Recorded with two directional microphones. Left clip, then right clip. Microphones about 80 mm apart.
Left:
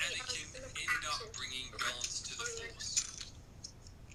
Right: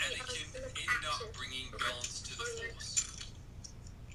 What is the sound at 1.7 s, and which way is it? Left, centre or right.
Cutlery, left.